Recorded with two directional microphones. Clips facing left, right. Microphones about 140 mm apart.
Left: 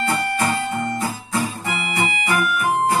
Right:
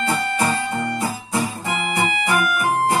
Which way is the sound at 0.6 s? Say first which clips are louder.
Even; 15° left (ahead or behind).